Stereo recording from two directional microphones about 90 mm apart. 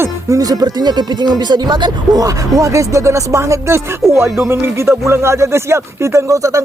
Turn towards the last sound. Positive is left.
turn(degrees=-35)  # may be behind; listen again after turning